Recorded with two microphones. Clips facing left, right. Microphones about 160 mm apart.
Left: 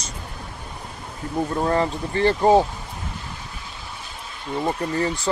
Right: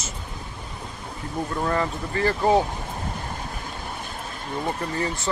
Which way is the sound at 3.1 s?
45° right (ahead or behind).